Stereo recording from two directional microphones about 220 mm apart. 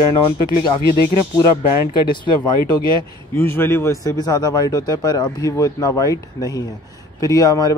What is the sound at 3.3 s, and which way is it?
Speech, 10° left (ahead or behind).